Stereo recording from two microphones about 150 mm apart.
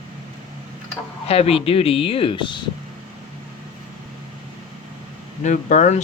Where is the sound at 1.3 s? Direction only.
40° left (ahead or behind).